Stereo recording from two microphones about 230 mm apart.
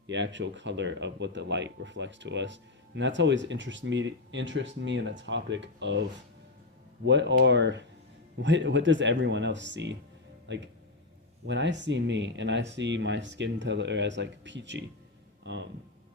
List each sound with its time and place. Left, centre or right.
0.1 s speech: right